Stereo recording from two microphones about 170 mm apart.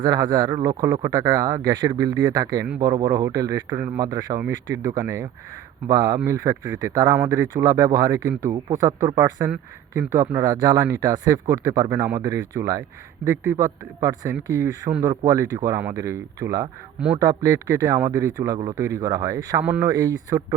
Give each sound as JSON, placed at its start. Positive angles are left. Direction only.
{"t": 0.0, "sound": "speech", "side_deg": -25}
{"t": 14.0, "sound": "speech", "side_deg": -20}